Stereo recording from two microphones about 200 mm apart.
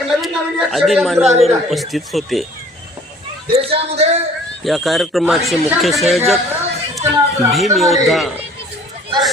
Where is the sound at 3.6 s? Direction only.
30° right (ahead or behind).